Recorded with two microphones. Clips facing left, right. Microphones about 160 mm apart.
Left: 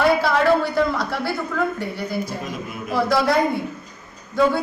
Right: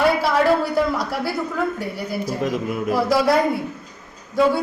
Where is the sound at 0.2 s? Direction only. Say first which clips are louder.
Even; 10° right (ahead or behind).